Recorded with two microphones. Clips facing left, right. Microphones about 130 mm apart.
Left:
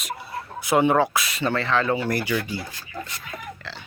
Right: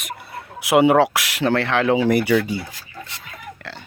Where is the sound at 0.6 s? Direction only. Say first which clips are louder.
Right 5 dB; 80° right.